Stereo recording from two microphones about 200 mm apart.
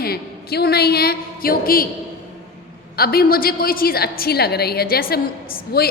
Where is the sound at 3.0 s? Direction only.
50° left (ahead or behind).